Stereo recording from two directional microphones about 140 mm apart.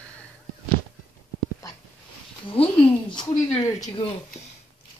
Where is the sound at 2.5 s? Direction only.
40° left (ahead or behind).